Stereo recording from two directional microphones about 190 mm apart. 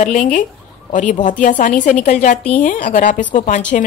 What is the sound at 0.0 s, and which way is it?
A woman's voice, 40° left (ahead or behind).